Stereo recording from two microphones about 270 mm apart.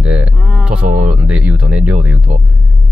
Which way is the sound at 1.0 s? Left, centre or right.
Centre.